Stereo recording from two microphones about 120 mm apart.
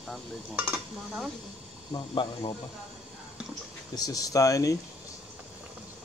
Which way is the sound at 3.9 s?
30° left (ahead or behind).